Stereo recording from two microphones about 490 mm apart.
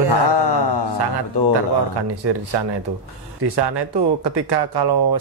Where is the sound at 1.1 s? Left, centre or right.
Right.